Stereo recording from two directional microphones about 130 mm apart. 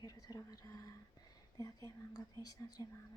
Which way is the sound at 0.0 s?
30° left (ahead or behind).